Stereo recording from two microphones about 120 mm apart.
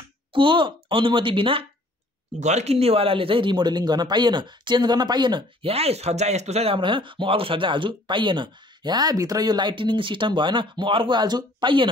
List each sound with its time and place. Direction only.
0.3 s speech: 45° right (ahead or behind)
2.4 s speech: 65° right (ahead or behind); by 5.7 s 40° right (ahead or behind)
5.7 s speech: 60° right (ahead or behind); by 11.9 s 45° right (ahead or behind)